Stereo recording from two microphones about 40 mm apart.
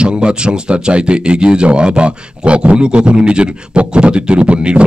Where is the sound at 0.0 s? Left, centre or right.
Right.